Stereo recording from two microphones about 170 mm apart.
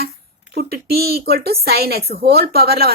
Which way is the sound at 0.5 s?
65° right (ahead or behind).